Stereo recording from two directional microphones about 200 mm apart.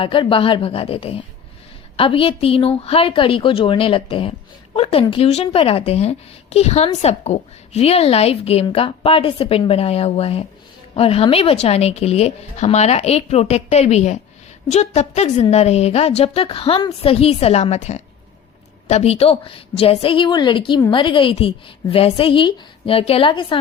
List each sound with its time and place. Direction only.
0.0 s a woman's voice: 25° left (ahead or behind)